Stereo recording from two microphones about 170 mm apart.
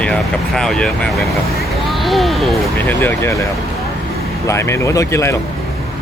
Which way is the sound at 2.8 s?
10° left (ahead or behind).